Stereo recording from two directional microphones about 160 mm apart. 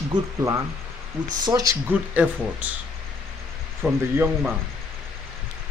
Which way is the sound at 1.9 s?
10° right (ahead or behind).